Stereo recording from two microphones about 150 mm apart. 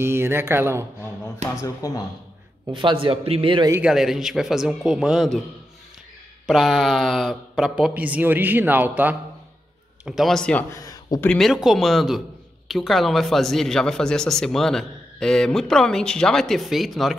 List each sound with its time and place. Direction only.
0.0 s speech: 15° right (ahead or behind)
1.5 s speech: 20° left (ahead or behind)
2.7 s speech: 35° right (ahead or behind)
3.9 s a man's voice: 5° right (ahead or behind)
6.4 s speech: centre (ahead or behind)
10.0 s a man's voice: centre (ahead or behind)
10.7 s a sound: 25° left (ahead or behind)
11.1 s a man's voice: 5° left (ahead or behind)